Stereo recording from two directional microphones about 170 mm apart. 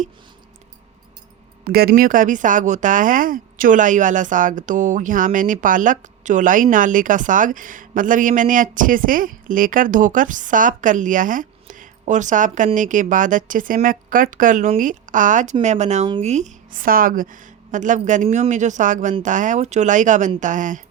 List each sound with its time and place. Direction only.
1.6 s speech: 60° right (ahead or behind)